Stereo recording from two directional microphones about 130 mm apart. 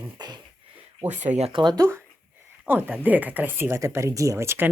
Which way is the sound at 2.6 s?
15° right (ahead or behind).